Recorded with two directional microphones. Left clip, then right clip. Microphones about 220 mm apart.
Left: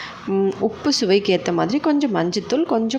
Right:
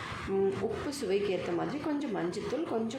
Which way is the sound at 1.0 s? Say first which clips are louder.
Left 12 dB; 40° left (ahead or behind).